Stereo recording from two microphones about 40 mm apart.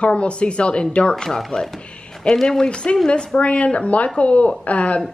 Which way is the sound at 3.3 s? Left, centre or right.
Left.